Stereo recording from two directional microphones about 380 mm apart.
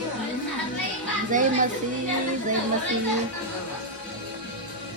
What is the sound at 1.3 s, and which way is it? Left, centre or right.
Speech, centre.